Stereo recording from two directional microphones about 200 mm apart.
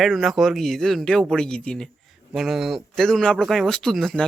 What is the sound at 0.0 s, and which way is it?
Speech, centre (ahead or behind).